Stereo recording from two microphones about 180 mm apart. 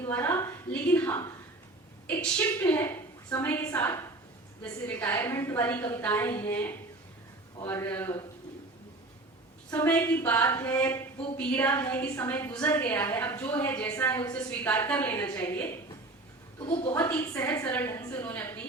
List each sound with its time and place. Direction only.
0.1 s a sound: 10° left (ahead or behind)
3.7 s speech: 15° left (ahead or behind)
9.6 s a woman's voice: 10° left (ahead or behind)
17.2 s speech: 20° left (ahead or behind)